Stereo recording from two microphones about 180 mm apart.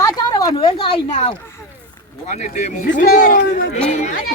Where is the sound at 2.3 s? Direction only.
40° left (ahead or behind); by 3.7 s 55° left (ahead or behind).